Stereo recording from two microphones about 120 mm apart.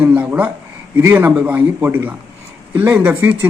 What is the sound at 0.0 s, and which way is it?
Speech, 15° right (ahead or behind).